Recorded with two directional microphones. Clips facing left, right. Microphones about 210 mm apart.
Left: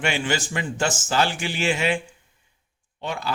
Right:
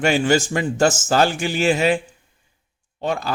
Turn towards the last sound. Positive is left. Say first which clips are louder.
# right 5 dB
turn(degrees=-40)  # may be behind; listen again after turning